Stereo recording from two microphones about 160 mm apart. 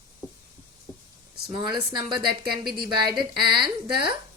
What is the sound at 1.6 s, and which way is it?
A woman's voice, 30° right (ahead or behind).